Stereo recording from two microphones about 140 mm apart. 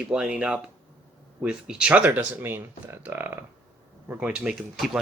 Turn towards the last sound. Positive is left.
turn(degrees=-5)  # may be behind; listen again after turning